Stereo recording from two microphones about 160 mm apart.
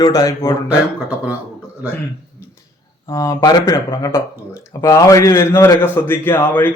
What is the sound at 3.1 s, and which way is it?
A man's voice, 20° left (ahead or behind).